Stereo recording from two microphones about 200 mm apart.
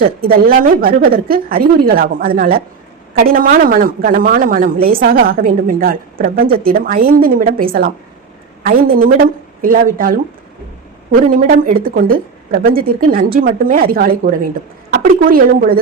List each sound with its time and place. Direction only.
0.0 s a woman's voice: 50° right (ahead or behind)
11.3 s a woman's voice: 45° right (ahead or behind)